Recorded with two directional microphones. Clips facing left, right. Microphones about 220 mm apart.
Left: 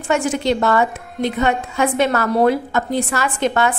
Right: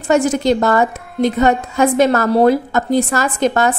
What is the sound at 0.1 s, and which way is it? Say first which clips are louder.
A woman's voice: right 4 dB; 40° right (ahead or behind).